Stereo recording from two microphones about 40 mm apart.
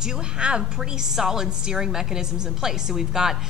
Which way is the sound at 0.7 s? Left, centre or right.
Centre.